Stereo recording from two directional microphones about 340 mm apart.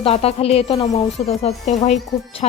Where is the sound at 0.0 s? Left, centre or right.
Centre.